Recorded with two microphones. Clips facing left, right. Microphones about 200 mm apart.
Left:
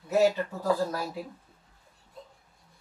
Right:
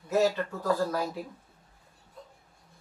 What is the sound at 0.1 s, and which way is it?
Speech, 15° left (ahead or behind).